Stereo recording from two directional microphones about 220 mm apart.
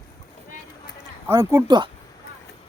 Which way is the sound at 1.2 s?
15° right (ahead or behind).